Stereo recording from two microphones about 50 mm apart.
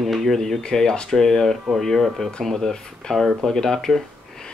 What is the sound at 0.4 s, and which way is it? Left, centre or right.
Speech, centre.